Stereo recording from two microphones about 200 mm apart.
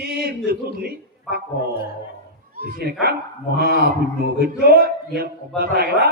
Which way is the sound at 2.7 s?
50° right (ahead or behind).